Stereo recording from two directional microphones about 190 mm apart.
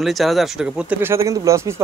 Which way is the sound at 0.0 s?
Centre (ahead or behind).